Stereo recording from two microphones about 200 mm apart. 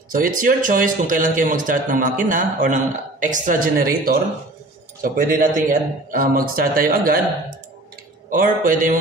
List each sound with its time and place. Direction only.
0.1 s speech: 45° right (ahead or behind)
8.3 s speech: 45° right (ahead or behind)